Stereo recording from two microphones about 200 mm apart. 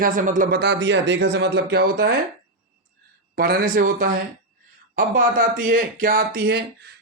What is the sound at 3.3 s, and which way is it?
Speech, 50° right (ahead or behind).